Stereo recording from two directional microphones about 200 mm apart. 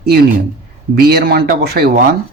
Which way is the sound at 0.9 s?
50° right (ahead or behind).